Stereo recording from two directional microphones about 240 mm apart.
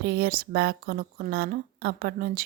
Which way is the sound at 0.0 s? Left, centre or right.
Right.